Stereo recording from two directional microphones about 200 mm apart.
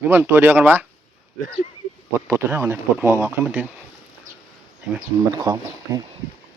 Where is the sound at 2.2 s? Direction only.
10° right (ahead or behind).